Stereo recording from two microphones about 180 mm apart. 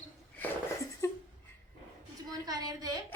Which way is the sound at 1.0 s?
15° left (ahead or behind).